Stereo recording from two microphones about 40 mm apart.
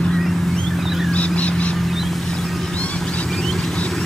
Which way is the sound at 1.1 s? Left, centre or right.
Left.